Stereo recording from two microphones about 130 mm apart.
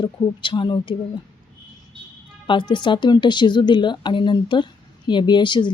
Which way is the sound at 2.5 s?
35° left (ahead or behind).